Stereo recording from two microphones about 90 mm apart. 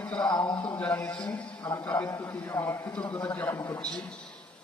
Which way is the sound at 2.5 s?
25° left (ahead or behind).